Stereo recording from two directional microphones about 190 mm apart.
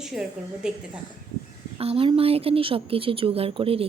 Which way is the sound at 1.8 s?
30° right (ahead or behind).